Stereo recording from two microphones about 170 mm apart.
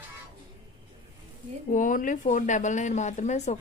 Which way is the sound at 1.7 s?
50° left (ahead or behind).